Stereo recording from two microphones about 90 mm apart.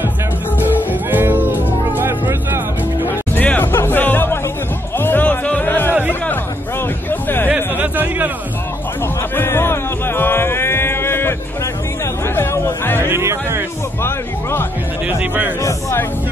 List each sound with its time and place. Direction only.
1.1 s music: 20° right (ahead or behind)
3.3 s music: 20° left (ahead or behind)
7.1 s a sound: 25° left (ahead or behind)
7.4 s a sound: 20° right (ahead or behind)
9.3 s music: 25° left (ahead or behind)
12.4 s chatter: 25° left (ahead or behind)
13.0 s music: 30° right (ahead or behind)
14.0 s music: 25° left (ahead or behind)
15.6 s a sound: 30° left (ahead or behind)